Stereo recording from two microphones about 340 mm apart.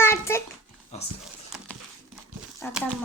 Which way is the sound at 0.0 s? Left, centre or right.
Centre.